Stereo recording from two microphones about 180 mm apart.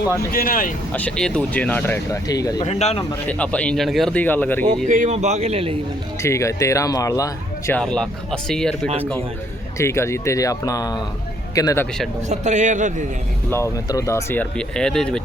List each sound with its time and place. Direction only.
0.3 s speech: 50° left (ahead or behind)
0.9 s speech: 5° left (ahead or behind)
2.6 s speech: 35° left (ahead or behind)
3.2 s speech: 5° left (ahead or behind)
4.9 s a man's voice: 40° right (ahead or behind)
6.2 s speech: 15° left (ahead or behind)
7.7 s speech: 5° left (ahead or behind)
9.7 s speech: 15° left (ahead or behind)
12.3 s a man's voice: 40° right (ahead or behind)
13.5 s speech: 15° left (ahead or behind)